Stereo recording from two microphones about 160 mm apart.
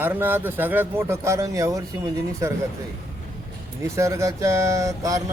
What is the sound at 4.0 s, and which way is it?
Speech, 20° right (ahead or behind).